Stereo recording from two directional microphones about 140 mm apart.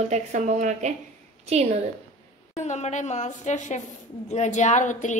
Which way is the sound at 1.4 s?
50° right (ahead or behind).